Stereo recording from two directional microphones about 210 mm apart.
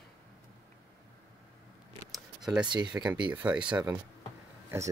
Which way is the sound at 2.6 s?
20° right (ahead or behind).